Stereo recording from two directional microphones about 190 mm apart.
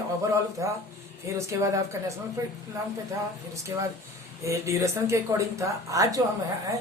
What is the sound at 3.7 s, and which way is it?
Speech, 20° right (ahead or behind).